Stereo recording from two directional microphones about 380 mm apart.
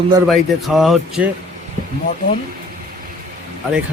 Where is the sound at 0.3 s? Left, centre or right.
Centre.